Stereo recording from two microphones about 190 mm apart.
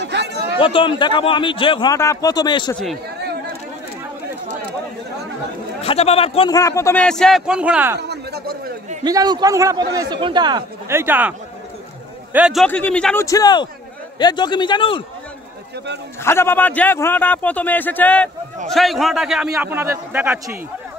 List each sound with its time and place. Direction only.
0.0 s chatter: 60° right (ahead or behind)
0.6 s a man's voice: 25° left (ahead or behind)
5.9 s a man's voice: 30° left (ahead or behind)
6.5 s speech: 15° left (ahead or behind); by 8.0 s 10° right (ahead or behind)
8.0 s a sound: 60° right (ahead or behind)
9.0 s a man's voice: 20° right (ahead or behind)
12.6 s a man's voice: 5° left (ahead or behind); by 15.0 s 25° left (ahead or behind)
16.3 s a man's voice: 10° left (ahead or behind); by 20.5 s 10° right (ahead or behind)